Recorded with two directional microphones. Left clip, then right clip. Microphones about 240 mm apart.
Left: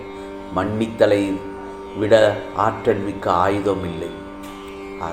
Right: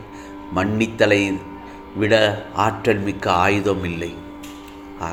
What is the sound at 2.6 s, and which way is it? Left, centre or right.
Speech, right.